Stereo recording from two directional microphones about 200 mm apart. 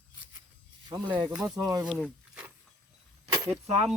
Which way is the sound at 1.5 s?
20° right (ahead or behind).